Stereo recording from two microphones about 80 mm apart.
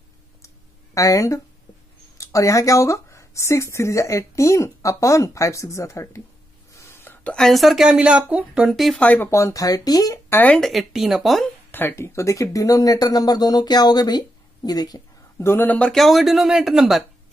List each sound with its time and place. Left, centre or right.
0.9 s speech: left
6.7 s a sound: left
7.3 s speech: centre
8.6 s speech: centre
9.0 s speech: left
9.3 s speech: left
10.6 s speech: centre
11.7 s speech: left
15.3 s speech: left
15.9 s speech: centre